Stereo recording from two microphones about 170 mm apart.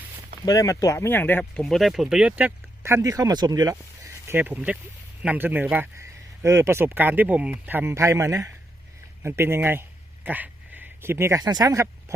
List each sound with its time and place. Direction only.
0.4 s speech: 20° left (ahead or behind); by 12.1 s 20° right (ahead or behind)